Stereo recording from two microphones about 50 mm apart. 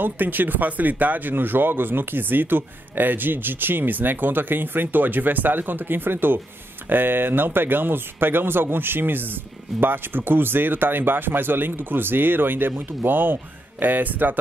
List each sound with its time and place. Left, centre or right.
0.0 s speech: right